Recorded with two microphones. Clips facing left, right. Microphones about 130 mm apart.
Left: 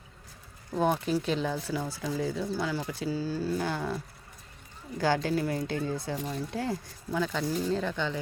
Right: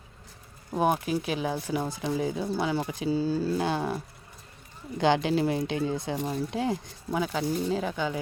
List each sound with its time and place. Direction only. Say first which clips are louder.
0.7 s speech: right 1 dB; 10° right (ahead or behind)